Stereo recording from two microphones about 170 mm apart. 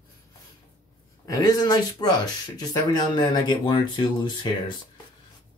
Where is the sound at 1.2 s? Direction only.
20° left (ahead or behind).